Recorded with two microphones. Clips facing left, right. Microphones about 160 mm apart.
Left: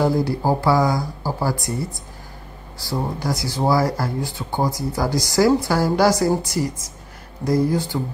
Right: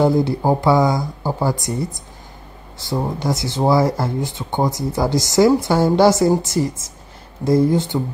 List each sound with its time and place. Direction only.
0.0 s speech: 20° right (ahead or behind)